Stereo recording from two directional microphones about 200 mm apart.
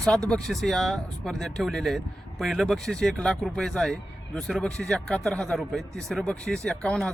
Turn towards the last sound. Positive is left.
turn(degrees=5)  # may be behind; listen again after turning